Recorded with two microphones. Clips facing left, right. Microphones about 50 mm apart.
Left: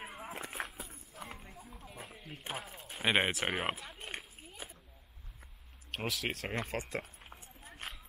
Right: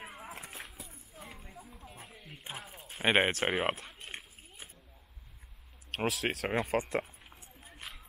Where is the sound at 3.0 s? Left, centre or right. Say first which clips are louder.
Right 3 dB; centre.